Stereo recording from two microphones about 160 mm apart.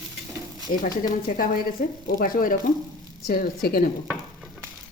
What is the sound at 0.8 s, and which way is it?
A woman's voice, 60° left (ahead or behind).